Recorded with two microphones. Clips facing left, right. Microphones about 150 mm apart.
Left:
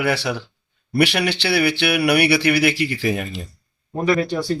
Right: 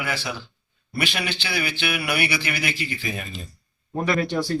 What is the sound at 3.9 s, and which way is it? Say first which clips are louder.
Speech: left 5 dB; 10° left (ahead or behind).